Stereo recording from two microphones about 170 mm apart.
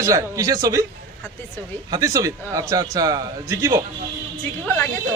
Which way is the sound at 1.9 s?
20° right (ahead or behind).